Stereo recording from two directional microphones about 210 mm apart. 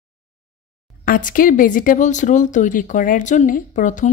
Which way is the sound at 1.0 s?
40° left (ahead or behind).